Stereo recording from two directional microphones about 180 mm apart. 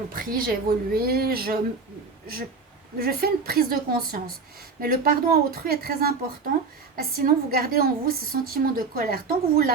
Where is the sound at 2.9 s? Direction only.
60° right (ahead or behind).